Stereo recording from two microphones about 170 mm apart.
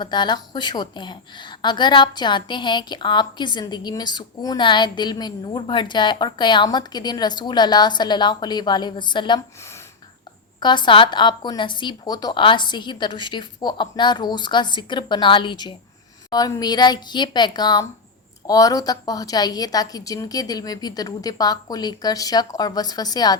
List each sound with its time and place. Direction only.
0.0 s a woman's voice: 25° left (ahead or behind)
9.6 s speech: 15° left (ahead or behind)
10.6 s a woman's voice: 25° left (ahead or behind)